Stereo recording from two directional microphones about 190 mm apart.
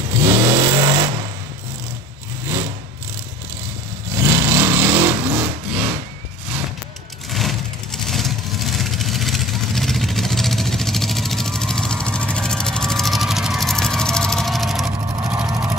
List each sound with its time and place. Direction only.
0.2 s vehicle: 15° right (ahead or behind)
2.4 s vehicle: 20° right (ahead or behind)
4.1 s vehicle: 15° right (ahead or behind)
7.2 s vehicle: centre (ahead or behind)